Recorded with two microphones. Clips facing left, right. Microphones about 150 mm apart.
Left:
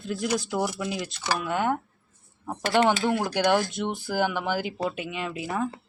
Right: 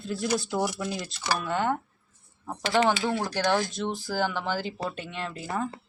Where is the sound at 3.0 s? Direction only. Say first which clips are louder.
Left 3 dB; 20° left (ahead or behind); by 5.7 s centre (ahead or behind).